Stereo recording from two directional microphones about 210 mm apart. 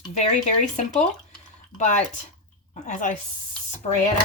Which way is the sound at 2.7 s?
35° left (ahead or behind).